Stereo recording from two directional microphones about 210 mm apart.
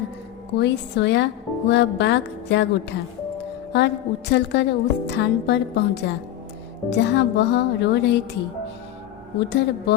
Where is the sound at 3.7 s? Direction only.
55° left (ahead or behind).